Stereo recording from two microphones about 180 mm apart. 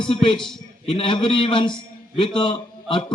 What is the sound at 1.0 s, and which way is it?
A man's voice, 25° left (ahead or behind).